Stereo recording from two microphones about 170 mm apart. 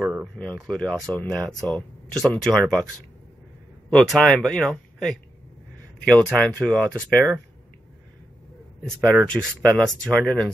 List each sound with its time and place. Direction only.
0.0 s a sound: 5° right (ahead or behind)
0.4 s speech: 5° left (ahead or behind)
3.9 s speech: 5° left (ahead or behind)
8.8 s speech: 5° left (ahead or behind)